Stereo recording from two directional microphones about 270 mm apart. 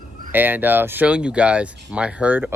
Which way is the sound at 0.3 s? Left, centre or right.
Centre.